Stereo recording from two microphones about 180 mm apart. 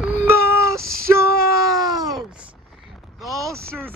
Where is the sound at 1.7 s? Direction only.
20° right (ahead or behind).